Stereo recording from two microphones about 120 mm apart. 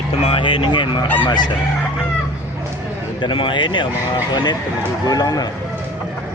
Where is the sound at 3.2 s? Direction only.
45° left (ahead or behind).